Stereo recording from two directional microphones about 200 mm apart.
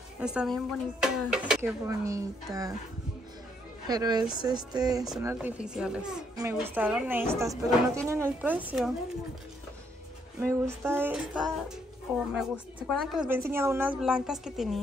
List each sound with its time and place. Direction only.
0.2 s speech: 5° right (ahead or behind)
1.9 s a woman's voice: 15° right (ahead or behind)
3.8 s a woman's voice: 20° right (ahead or behind)
10.4 s a woman's voice: 10° right (ahead or behind)
13.3 s speech: 10° right (ahead or behind)